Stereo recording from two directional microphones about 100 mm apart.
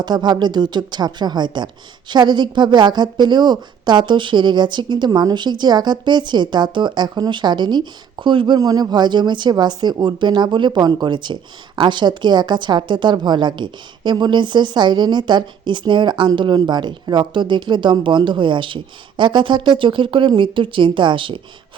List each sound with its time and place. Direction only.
0.0 s speech: 45° right (ahead or behind)
8.5 s speech: 40° right (ahead or behind)